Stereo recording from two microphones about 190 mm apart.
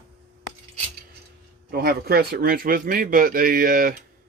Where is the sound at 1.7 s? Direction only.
55° right (ahead or behind).